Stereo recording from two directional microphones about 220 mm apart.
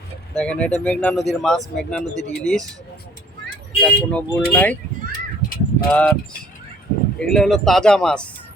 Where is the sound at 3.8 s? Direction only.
5° left (ahead or behind).